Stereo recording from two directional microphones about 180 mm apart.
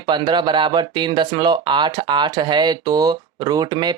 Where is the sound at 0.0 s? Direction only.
25° right (ahead or behind).